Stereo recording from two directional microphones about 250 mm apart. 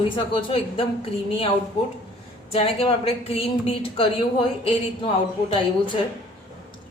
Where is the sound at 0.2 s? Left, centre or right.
Left.